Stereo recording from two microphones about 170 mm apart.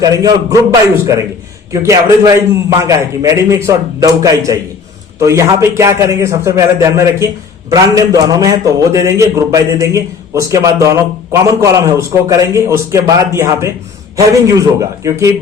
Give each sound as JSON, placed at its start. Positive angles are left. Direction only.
{"t": 0.0, "sound": "a man's voice", "side_deg": -20}